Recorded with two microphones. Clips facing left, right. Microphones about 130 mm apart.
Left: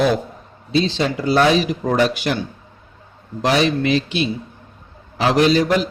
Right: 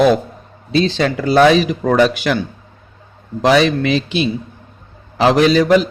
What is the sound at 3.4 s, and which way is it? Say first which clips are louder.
Speech: right 4 dB; 90° right.